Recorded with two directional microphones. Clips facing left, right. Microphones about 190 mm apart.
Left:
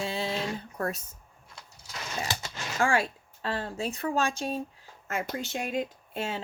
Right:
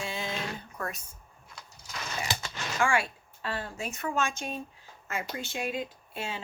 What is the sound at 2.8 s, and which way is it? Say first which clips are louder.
Speech: left 2 dB; 35° left (ahead or behind).